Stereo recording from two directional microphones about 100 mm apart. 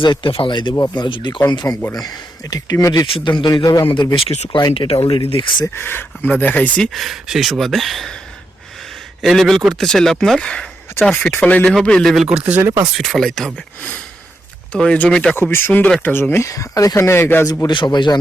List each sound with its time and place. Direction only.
0.0 s speech: 60° left (ahead or behind); by 3.1 s 35° left (ahead or behind)
3.2 s speech: 50° left (ahead or behind)
4.7 s speech: 70° left (ahead or behind); by 5.6 s 55° left (ahead or behind)
5.6 s speech: 25° left (ahead or behind)
7.0 s a man's voice: centre (ahead or behind)
9.2 s a man's voice: centre (ahead or behind); by 12.7 s 15° right (ahead or behind)
12.9 s a man's voice: 5° left (ahead or behind)
14.7 s speech: 10° left (ahead or behind)
15.4 s speech: 20° left (ahead or behind)
17.7 s speech: 50° left (ahead or behind)